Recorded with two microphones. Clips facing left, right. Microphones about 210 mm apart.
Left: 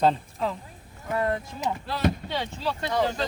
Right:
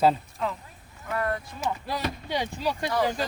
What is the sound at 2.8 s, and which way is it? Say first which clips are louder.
Speech: left 1 dB; 20° left (ahead or behind).